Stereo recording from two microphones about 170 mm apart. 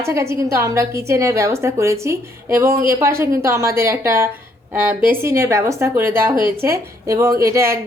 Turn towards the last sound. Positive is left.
turn(degrees=-20)  # may be behind; listen again after turning